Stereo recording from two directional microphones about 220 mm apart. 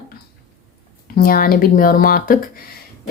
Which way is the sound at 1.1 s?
40° left (ahead or behind).